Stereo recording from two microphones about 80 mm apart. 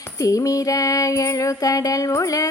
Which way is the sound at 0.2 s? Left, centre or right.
Left.